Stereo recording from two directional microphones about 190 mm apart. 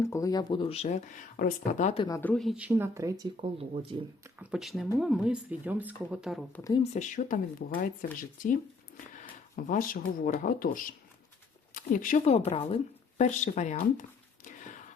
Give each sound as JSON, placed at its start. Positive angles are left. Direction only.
{"t": 0.0, "sound": "speech", "side_deg": 15}
{"t": 2.0, "sound": "speech", "side_deg": 15}
{"t": 2.3, "sound": "speech", "side_deg": 0}
{"t": 3.4, "sound": "speech", "side_deg": -30}
{"t": 4.4, "sound": "speech", "side_deg": 0}
{"t": 6.6, "sound": "speech", "side_deg": 15}
{"t": 6.9, "sound": "speech", "side_deg": 40}
{"t": 9.1, "sound": "a sound", "side_deg": 45}
{"t": 10.2, "sound": "speech", "side_deg": 45}
{"t": 14.4, "sound": "a sound", "side_deg": 40}